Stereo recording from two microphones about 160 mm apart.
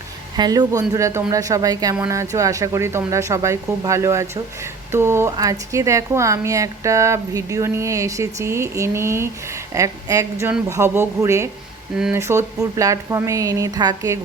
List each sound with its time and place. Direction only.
0.3 s a woman's voice: 25° right (ahead or behind)